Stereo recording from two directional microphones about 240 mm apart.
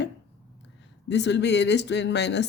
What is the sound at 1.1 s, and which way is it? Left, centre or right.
Speech, left.